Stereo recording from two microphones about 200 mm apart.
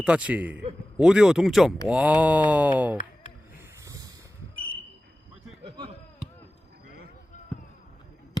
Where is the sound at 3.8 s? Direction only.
15° right (ahead or behind).